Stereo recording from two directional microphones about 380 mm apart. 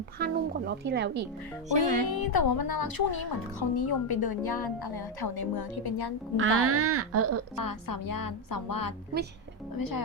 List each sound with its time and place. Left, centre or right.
0.2 s speech: right
1.7 s music: centre
2.1 s speech: left
6.3 s speech: right
7.5 s speech: left